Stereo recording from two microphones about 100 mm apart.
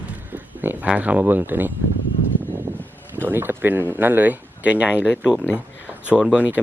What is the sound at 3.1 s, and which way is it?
Speech, 20° right (ahead or behind).